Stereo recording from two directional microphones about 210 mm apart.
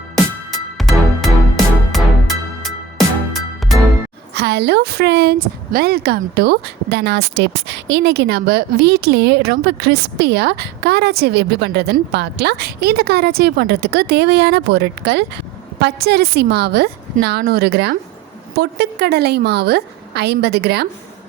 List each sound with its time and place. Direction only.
0.8 s music: centre (ahead or behind)
4.4 s a woman's voice: 50° right (ahead or behind)